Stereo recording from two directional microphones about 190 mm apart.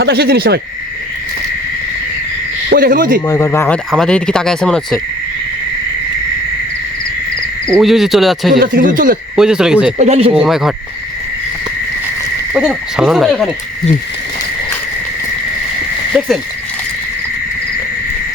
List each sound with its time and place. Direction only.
0.0 s speech: 55° right (ahead or behind)
2.6 s speech: 50° right (ahead or behind)
3.2 s speech: 15° left (ahead or behind)
3.9 s speech: 5° left (ahead or behind)
7.7 s speech: centre (ahead or behind)
8.5 s speech: 50° right (ahead or behind)
9.3 s speech: 5° right (ahead or behind)
10.0 s speech: 35° right (ahead or behind)
10.3 s speech: 5° right (ahead or behind)
12.5 s speech: 5° right (ahead or behind)